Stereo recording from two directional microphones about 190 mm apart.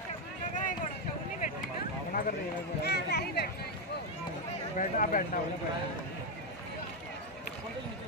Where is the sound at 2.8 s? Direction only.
60° left (ahead or behind).